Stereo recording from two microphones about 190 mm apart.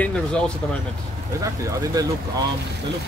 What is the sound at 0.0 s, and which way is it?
Speech, 5° left (ahead or behind).